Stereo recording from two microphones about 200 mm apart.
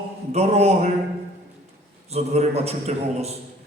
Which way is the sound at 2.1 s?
30° right (ahead or behind).